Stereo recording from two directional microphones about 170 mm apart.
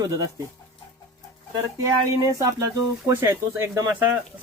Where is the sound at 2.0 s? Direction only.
20° right (ahead or behind).